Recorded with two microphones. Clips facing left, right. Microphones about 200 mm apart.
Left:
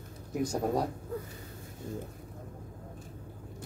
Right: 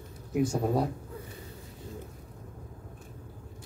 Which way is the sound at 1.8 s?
50° left (ahead or behind).